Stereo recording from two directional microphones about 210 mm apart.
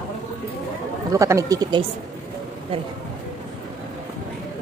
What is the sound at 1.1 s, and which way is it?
Speech, 15° right (ahead or behind).